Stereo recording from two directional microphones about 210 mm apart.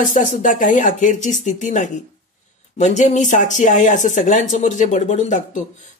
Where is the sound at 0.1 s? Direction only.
40° left (ahead or behind).